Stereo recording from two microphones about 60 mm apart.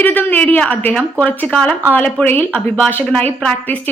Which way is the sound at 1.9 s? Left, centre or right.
Left.